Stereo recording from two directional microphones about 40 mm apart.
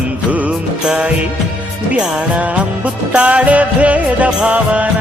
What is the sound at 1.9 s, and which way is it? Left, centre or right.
Music, centre.